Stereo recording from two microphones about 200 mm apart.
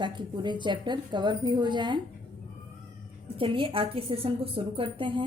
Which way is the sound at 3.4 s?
25° right (ahead or behind).